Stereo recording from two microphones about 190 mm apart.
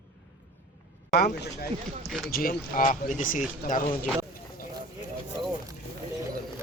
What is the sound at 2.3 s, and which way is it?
Speech, 50° left (ahead or behind).